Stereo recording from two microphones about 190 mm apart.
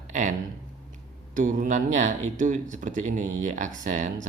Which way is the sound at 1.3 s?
45° right (ahead or behind).